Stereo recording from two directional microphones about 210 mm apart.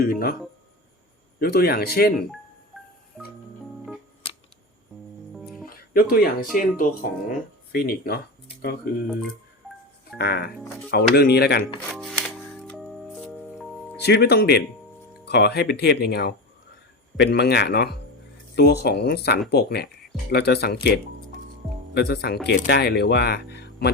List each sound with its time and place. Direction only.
0.0 s speech: 45° left (ahead or behind)
1.4 s speech: 45° left (ahead or behind)
2.7 s music: centre (ahead or behind)
5.3 s music: centre (ahead or behind)
5.6 s music: 45° left (ahead or behind)
6.6 s speech: 40° left (ahead or behind)
10.2 s speech: 50° left (ahead or behind)
11.9 s music: centre (ahead or behind)
14.0 s speech: 50° left (ahead or behind)
21.9 s speech: 50° left (ahead or behind)